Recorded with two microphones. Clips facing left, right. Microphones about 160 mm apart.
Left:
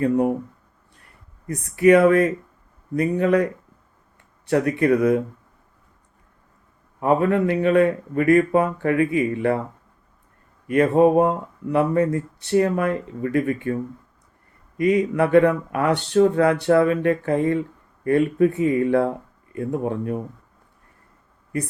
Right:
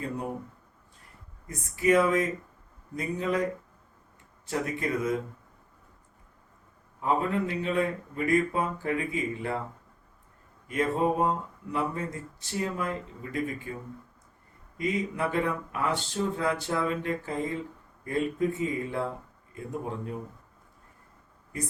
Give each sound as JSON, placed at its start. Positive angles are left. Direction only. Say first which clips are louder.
{"t": 0.0, "sound": "speech", "louder": "left 14 dB", "side_deg": 65}
{"t": 1.5, "sound": "speech", "louder": "left 10 dB", "side_deg": 65}
{"t": 7.0, "sound": "speech", "louder": "left 9 dB", "side_deg": 65}
{"t": 10.7, "sound": "speech", "louder": "left 11 dB", "side_deg": 65}
{"t": 14.8, "sound": "speech", "louder": "left 11 dB", "side_deg": 65}